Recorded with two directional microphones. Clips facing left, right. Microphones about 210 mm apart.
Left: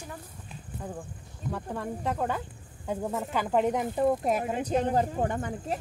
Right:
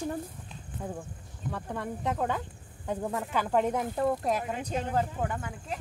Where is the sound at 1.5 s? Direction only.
10° left (ahead or behind).